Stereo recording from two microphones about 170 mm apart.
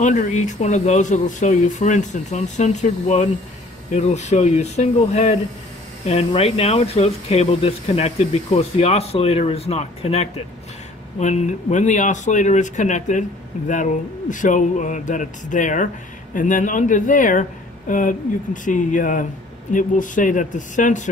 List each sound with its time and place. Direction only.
0.0 s speech: 45° left (ahead or behind)
14.3 s speech: 50° left (ahead or behind)